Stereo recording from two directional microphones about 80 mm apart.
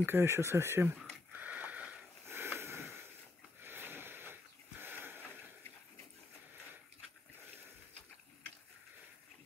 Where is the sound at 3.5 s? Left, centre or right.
Right.